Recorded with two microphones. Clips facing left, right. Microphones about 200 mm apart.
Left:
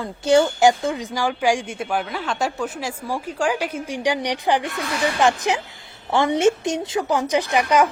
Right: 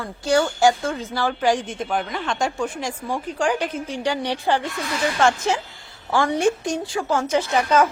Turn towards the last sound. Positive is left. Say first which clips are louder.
# even
turn(degrees=15)  # may be behind; listen again after turning